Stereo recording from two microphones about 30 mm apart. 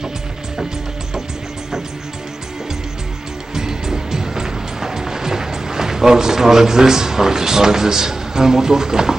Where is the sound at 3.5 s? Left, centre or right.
Centre.